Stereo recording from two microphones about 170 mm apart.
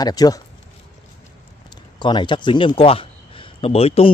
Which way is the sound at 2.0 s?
25° left (ahead or behind).